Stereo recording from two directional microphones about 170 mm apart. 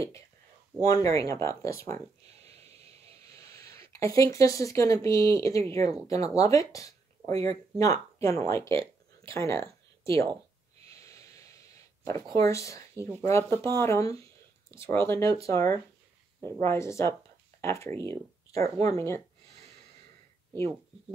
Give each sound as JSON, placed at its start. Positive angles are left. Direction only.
{"t": 0.7, "sound": "speech", "side_deg": 20}
{"t": 2.4, "sound": "a sound", "side_deg": -35}
{"t": 3.9, "sound": "speech", "side_deg": 20}
{"t": 10.0, "sound": "speech", "side_deg": -30}
{"t": 10.9, "sound": "snort", "side_deg": 20}
{"t": 12.4, "sound": "speech", "side_deg": 20}